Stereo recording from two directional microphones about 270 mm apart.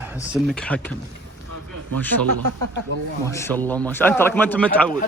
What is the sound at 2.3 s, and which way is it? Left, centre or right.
Speech, right.